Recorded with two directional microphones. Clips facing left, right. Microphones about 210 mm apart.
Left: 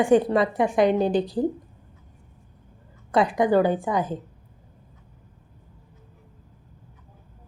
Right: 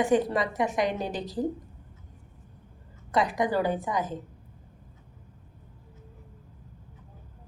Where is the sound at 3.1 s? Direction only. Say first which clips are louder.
Left 6 dB; 30° left (ahead or behind).